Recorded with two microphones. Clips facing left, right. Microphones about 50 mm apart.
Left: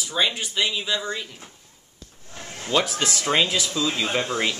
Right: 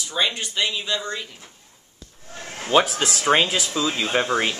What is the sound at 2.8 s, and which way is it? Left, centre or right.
Speech, centre.